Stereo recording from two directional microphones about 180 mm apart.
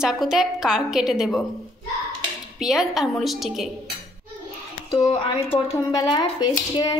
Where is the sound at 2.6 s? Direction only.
Centre (ahead or behind).